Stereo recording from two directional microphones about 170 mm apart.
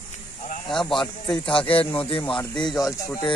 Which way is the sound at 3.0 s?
20° left (ahead or behind).